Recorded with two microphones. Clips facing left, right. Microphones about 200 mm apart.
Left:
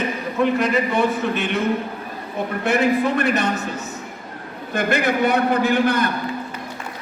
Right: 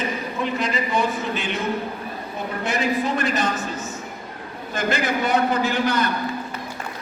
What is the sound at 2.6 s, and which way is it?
A man's voice, 60° left (ahead or behind).